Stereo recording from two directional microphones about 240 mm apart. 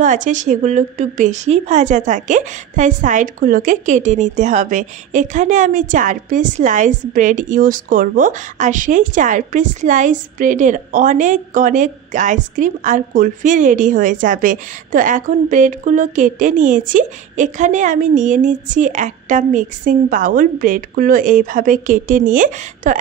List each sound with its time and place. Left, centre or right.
0.0 s a woman's voice: right